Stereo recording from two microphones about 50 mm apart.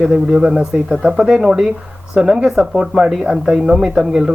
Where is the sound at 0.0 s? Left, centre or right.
Centre.